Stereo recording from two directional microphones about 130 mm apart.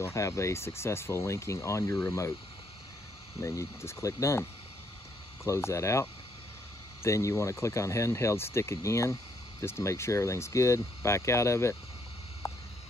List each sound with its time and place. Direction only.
0.0 s speech: 25° left (ahead or behind)
3.3 s speech: 20° left (ahead or behind)
12.4 s a sound: 25° left (ahead or behind)